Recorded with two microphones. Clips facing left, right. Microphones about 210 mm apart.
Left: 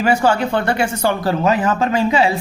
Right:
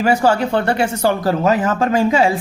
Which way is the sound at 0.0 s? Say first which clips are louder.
Right 1 dB; 40° right (ahead or behind).